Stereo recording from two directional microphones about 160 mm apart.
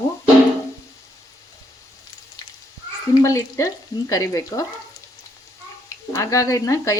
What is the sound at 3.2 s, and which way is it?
Speech, 20° left (ahead or behind).